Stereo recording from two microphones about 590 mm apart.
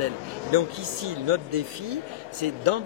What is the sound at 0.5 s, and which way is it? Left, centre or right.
Speech, right.